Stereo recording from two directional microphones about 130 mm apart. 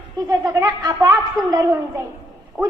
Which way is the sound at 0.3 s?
30° right (ahead or behind).